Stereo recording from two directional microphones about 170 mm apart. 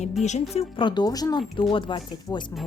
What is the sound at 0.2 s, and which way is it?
Speech, 45° left (ahead or behind).